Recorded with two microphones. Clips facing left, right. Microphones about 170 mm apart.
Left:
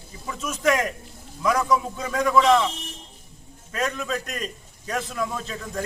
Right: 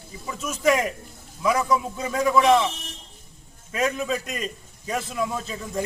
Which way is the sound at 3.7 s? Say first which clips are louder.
Right 2 dB; 5° right (ahead or behind).